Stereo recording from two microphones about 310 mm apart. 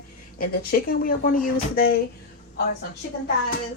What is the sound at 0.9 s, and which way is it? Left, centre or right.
Speech, left.